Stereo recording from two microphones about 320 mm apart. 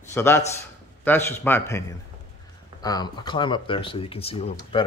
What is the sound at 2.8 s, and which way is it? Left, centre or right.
Speech, centre.